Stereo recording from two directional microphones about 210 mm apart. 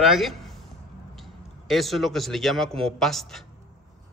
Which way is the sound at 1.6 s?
Centre (ahead or behind).